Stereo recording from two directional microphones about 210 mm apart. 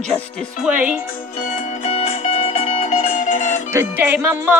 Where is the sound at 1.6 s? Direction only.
35° left (ahead or behind).